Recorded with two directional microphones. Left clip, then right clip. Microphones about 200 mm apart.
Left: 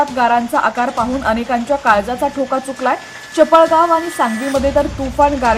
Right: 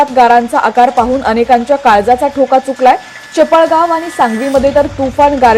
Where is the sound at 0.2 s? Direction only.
30° right (ahead or behind).